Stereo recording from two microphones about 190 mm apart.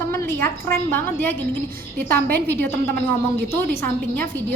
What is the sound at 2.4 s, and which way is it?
Speech, 10° left (ahead or behind).